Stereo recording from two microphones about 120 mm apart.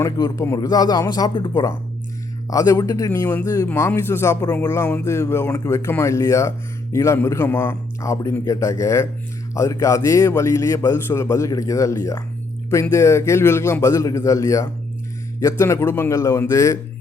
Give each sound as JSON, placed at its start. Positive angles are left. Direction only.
{"t": 0.0, "sound": "a man's voice", "side_deg": 30}
{"t": 3.1, "sound": "speech", "side_deg": 15}
{"t": 3.4, "sound": "a man's voice", "side_deg": 30}